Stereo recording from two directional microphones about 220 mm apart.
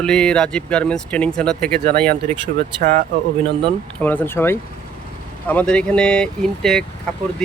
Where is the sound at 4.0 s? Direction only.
10° left (ahead or behind).